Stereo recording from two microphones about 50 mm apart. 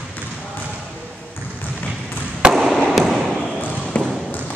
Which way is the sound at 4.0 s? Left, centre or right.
Left.